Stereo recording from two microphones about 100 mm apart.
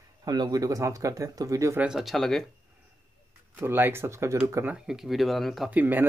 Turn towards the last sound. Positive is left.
turn(degrees=-20)  # may be behind; listen again after turning